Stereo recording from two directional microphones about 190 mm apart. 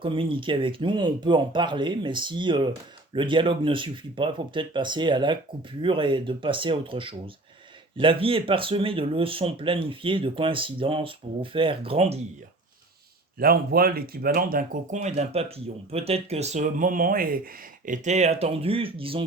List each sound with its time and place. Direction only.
0.0 s speech: 25° right (ahead or behind)
13.4 s speech: 50° right (ahead or behind); by 19.2 s 30° right (ahead or behind)